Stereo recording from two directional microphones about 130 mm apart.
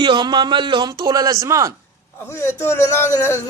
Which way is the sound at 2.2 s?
20° left (ahead or behind).